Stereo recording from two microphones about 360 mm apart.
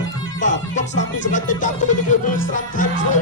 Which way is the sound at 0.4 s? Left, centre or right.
Left.